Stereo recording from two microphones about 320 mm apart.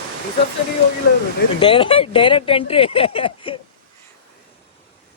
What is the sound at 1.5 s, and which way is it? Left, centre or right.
Speech, centre.